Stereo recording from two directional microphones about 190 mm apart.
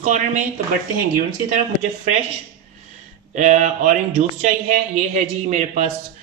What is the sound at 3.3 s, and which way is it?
Speech, 40° right (ahead or behind).